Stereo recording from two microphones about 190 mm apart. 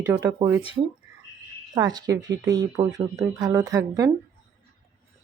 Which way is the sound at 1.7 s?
20° right (ahead or behind).